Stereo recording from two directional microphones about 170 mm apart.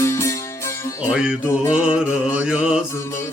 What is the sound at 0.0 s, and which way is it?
Music, 15° left (ahead or behind).